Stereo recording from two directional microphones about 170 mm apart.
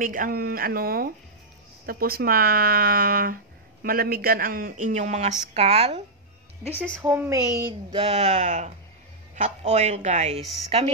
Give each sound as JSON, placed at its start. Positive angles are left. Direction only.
{"t": 0.0, "sound": "a man's voice", "side_deg": -55}
{"t": 7.0, "sound": "speech", "side_deg": -10}
{"t": 7.9, "sound": "a woman's voice", "side_deg": -35}